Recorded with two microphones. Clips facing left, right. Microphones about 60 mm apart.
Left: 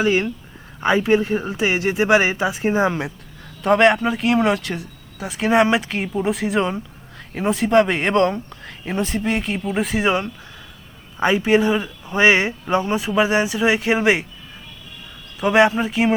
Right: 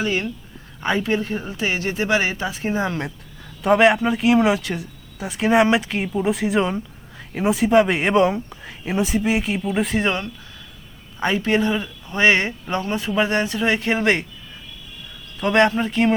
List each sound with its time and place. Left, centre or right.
0.0 s speech: centre
3.6 s speech: centre
11.2 s speech: centre
15.4 s speech: centre